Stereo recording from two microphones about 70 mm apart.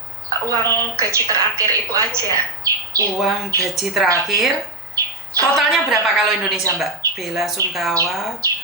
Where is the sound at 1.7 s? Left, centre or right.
Right.